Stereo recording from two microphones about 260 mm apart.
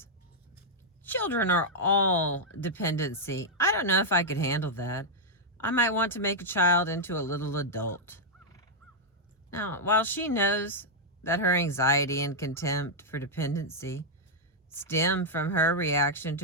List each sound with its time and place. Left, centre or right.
1.0 s speech: centre